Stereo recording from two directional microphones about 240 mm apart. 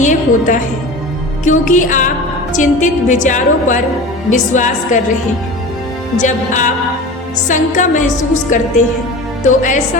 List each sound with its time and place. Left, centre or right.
0.0 s music: left
1.5 s a woman's voice: left
6.1 s a woman's voice: left